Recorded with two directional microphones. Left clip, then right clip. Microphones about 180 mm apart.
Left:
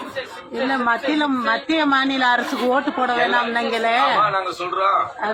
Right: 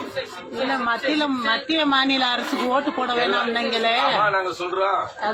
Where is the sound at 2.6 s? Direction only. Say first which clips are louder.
Left 3 dB; centre (ahead or behind).